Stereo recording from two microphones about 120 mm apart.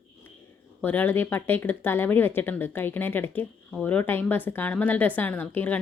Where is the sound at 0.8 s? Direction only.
15° left (ahead or behind).